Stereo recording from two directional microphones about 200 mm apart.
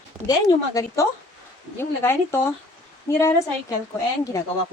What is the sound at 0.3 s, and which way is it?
Speech, 20° left (ahead or behind).